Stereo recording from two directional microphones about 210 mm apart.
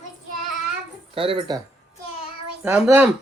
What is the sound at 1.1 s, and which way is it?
Speech, 25° right (ahead or behind).